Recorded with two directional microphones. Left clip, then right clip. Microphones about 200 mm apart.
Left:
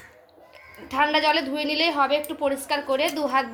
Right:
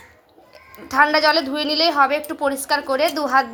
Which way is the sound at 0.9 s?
30° right (ahead or behind).